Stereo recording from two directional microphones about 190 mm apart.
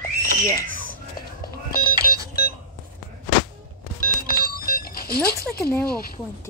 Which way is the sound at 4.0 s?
50° left (ahead or behind).